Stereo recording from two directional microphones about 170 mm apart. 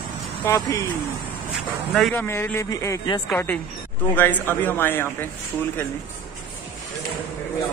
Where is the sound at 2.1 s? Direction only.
15° left (ahead or behind).